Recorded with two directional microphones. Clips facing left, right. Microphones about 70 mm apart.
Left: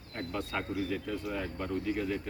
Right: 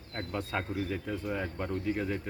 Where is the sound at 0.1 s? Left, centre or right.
Centre.